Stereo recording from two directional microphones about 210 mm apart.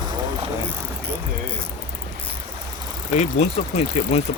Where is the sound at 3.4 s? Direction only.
30° left (ahead or behind).